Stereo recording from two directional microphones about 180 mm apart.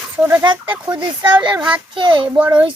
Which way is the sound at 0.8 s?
25° right (ahead or behind).